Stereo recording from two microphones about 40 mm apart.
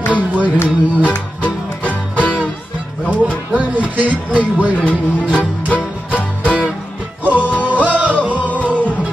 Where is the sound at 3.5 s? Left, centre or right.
Right.